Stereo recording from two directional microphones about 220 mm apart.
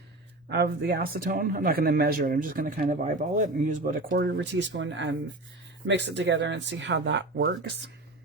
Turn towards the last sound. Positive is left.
turn(degrees=-50)  # may be behind; listen again after turning